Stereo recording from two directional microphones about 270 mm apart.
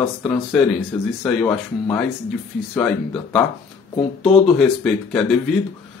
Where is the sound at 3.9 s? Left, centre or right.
Left.